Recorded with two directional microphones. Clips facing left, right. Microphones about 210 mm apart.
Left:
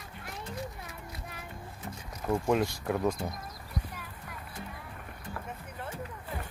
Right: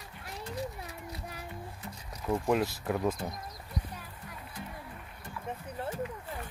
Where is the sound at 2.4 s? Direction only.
5° right (ahead or behind).